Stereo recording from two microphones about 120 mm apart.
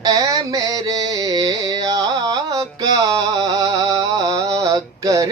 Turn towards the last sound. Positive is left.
turn(degrees=-30)  # may be behind; listen again after turning